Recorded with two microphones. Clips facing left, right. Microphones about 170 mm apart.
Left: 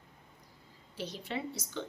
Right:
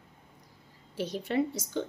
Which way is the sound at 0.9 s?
50° right (ahead or behind).